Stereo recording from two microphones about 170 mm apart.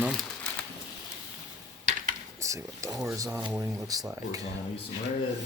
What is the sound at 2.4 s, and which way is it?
Speech, 20° right (ahead or behind).